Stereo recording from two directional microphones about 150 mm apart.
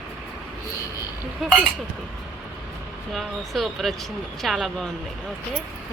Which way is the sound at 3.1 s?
Centre (ahead or behind).